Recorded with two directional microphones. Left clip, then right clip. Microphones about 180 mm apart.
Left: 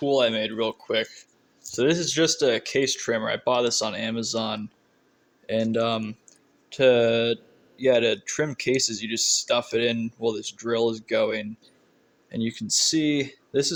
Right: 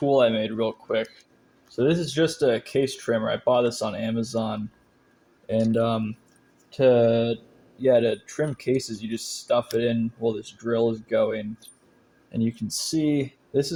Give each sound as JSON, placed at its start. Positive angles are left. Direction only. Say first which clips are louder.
{"t": 0.0, "sound": "speech", "louder": "right 2 dB", "side_deg": 15}
{"t": 5.7, "sound": "speech", "louder": "right 1 dB", "side_deg": 25}